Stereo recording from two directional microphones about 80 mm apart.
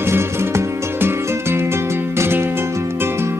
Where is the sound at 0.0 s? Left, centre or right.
Right.